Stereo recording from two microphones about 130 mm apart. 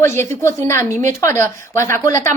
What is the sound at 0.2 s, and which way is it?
A woman's voice, 20° left (ahead or behind).